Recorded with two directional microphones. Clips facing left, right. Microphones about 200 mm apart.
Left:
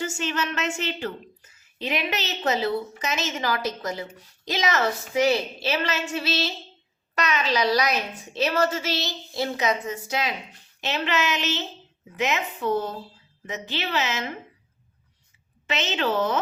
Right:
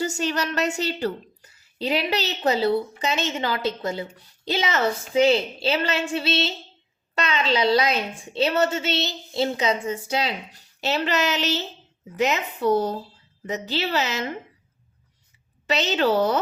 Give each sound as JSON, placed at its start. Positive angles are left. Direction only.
{"t": 0.0, "sound": "a woman's voice", "side_deg": -40}
{"t": 15.6, "sound": "a woman's voice", "side_deg": -40}